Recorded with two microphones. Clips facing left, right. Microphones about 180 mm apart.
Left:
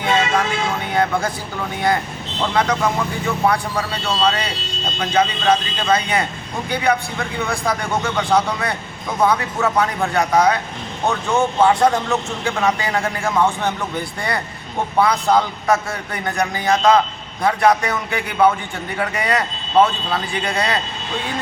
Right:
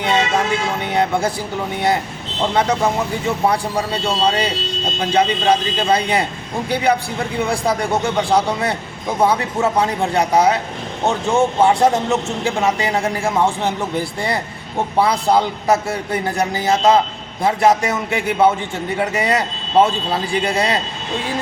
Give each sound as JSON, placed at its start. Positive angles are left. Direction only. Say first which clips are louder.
{"t": 0.0, "sound": "vehicle", "louder": "right 1 dB", "side_deg": -25}
{"t": 0.9, "sound": "a man's voice", "louder": "right 2 dB", "side_deg": -25}
{"t": 2.4, "sound": "a man's voice", "louder": "right 2 dB", "side_deg": -25}